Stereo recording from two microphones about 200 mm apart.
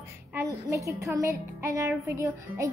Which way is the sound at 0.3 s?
15° right (ahead or behind).